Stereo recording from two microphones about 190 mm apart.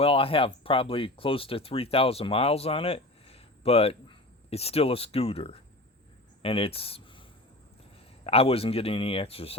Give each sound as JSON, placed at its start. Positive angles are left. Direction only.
{"t": 0.0, "sound": "speech", "side_deg": 30}